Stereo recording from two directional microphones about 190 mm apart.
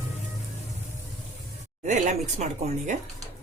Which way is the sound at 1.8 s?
40° right (ahead or behind).